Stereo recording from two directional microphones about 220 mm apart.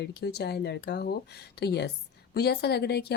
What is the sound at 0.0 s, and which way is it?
Speech, 50° left (ahead or behind).